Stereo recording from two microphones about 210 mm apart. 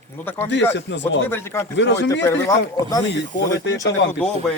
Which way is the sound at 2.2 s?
15° left (ahead or behind).